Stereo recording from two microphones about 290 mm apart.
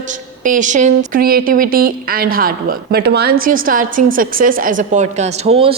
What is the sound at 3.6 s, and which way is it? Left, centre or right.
A woman's voice, right.